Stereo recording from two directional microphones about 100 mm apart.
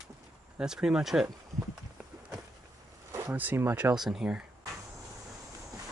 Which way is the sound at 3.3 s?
20° right (ahead or behind).